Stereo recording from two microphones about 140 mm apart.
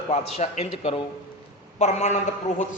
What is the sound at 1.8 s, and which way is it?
Speech, 55° left (ahead or behind).